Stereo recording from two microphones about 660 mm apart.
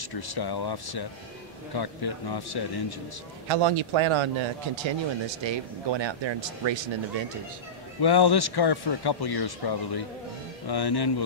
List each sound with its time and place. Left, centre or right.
0.0 s a man's voice: left
3.4 s speech: right
8.0 s a man's voice: left